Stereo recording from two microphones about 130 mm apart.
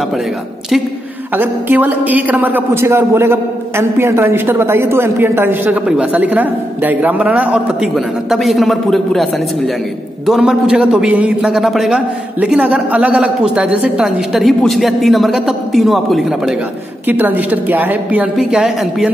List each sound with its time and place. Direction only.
1.3 s a man's voice: 15° right (ahead or behind)
17.1 s a man's voice: 15° right (ahead or behind)
18.3 s a man's voice: centre (ahead or behind)